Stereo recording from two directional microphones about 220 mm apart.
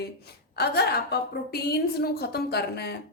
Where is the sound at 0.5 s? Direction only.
45° left (ahead or behind).